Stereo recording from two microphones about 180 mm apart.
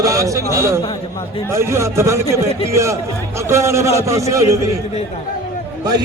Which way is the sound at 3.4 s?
15° right (ahead or behind).